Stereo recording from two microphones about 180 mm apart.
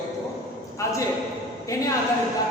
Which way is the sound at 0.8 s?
15° left (ahead or behind).